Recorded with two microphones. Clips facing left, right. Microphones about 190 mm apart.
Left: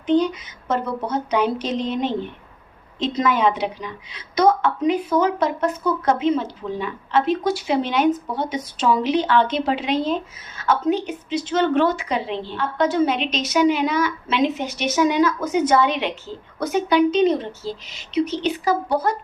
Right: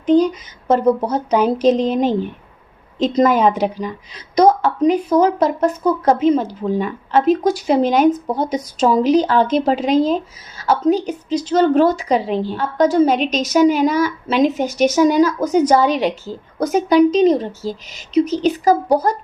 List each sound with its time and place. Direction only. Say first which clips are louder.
0.0 s a woman's voice: right 5 dB; 40° right (ahead or behind)